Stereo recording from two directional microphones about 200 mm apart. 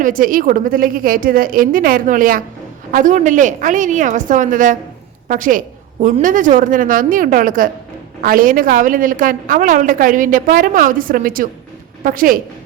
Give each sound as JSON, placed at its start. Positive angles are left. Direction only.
{"t": 0.0, "sound": "a woman's voice", "side_deg": -45}